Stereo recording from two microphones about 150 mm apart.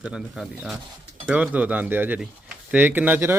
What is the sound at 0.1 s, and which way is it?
Speech, 5° right (ahead or behind).